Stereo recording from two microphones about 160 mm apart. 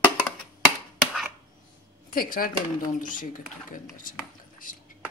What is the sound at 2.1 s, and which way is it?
Speech, 60° left (ahead or behind).